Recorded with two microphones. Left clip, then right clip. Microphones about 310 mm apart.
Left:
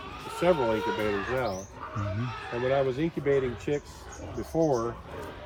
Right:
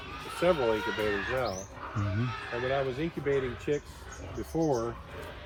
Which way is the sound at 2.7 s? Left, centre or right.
Left.